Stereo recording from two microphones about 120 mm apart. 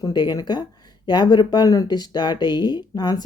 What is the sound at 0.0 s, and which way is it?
Speech, 35° left (ahead or behind).